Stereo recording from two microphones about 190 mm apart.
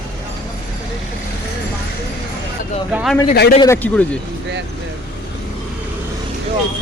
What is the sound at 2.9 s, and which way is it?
Speech, 5° right (ahead or behind).